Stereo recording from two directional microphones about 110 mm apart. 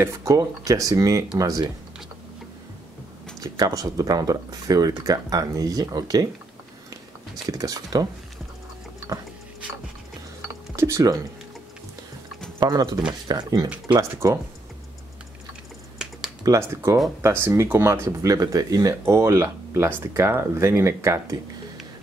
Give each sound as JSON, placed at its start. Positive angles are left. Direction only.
{"t": 0.0, "sound": "speech", "side_deg": -30}
{"t": 3.3, "sound": "speech", "side_deg": -35}
{"t": 7.4, "sound": "speech", "side_deg": -35}
{"t": 10.8, "sound": "speech", "side_deg": -30}
{"t": 12.5, "sound": "speech", "side_deg": -40}
{"t": 16.0, "sound": "computer keyboard", "side_deg": -5}
{"t": 16.4, "sound": "speech", "side_deg": -25}